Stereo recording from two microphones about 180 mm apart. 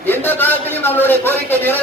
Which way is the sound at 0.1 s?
10° left (ahead or behind).